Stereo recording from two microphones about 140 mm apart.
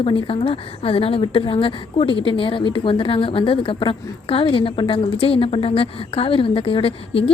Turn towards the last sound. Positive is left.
turn(degrees=40)  # may be behind; listen again after turning